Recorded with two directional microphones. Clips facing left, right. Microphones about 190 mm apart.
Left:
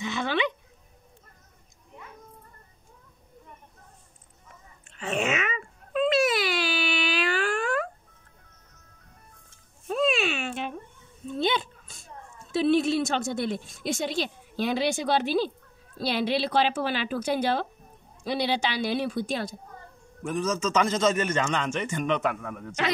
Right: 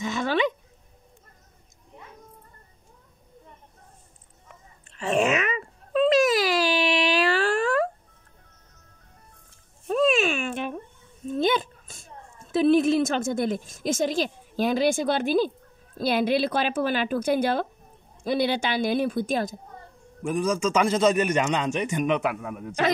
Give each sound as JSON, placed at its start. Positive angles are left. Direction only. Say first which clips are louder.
{"t": 0.0, "sound": "dog", "louder": "right 3 dB", "side_deg": -45}
{"t": 4.9, "sound": "baby cry", "louder": "right 5 dB", "side_deg": -40}
{"t": 9.8, "sound": "a sound", "louder": "right 4 dB", "side_deg": -45}
{"t": 12.5, "sound": "a woman's voice", "louder": "right 3 dB", "side_deg": -50}
{"t": 20.2, "sound": "a man's voice", "louder": "right 3 dB", "side_deg": -10}